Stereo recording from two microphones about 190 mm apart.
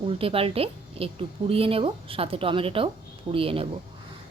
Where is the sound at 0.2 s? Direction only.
30° right (ahead or behind).